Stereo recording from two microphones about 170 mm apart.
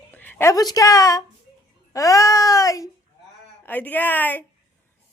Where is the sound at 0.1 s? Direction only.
10° left (ahead or behind).